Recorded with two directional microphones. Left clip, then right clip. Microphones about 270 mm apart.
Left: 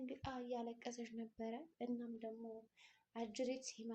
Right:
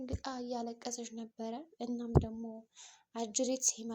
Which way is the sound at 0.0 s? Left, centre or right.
Right.